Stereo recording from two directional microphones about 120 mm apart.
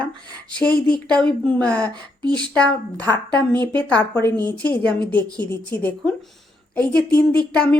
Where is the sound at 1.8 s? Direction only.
35° right (ahead or behind).